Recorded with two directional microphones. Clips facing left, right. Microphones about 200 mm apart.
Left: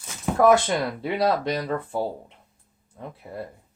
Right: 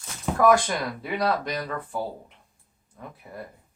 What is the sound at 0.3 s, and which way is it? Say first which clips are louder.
Speech: left 2 dB; 25° left (ahead or behind).